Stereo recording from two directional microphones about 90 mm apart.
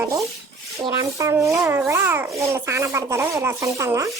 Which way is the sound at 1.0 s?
35° right (ahead or behind).